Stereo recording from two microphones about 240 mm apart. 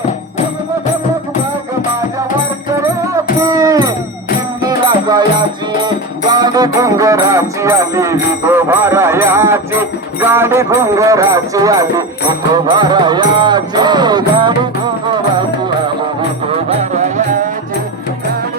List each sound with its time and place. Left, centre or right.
3.4 s music: centre
6.3 s music: centre
16.5 s music: right